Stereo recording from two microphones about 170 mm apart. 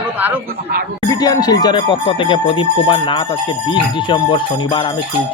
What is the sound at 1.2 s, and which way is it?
Speech, 25° left (ahead or behind).